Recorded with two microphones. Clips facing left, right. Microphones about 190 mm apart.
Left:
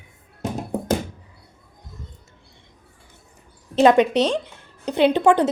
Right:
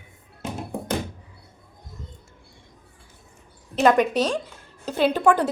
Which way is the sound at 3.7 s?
25° left (ahead or behind).